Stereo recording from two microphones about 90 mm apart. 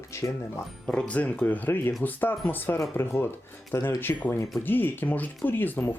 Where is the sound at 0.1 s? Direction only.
30° left (ahead or behind).